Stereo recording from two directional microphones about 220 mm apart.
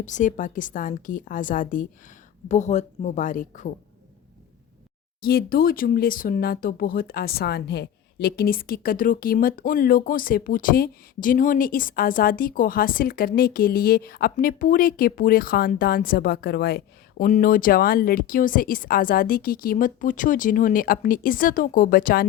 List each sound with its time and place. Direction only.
0.0 s speech: 35° left (ahead or behind)
5.2 s speech: 45° left (ahead or behind)